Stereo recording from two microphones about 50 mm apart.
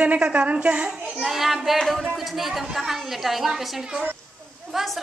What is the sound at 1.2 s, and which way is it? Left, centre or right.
A woman's voice, centre.